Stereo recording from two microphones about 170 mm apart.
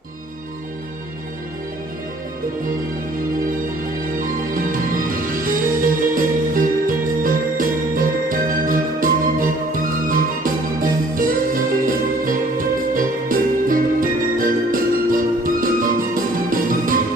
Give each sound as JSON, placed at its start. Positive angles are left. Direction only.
{"t": 4.6, "sound": "music", "side_deg": -55}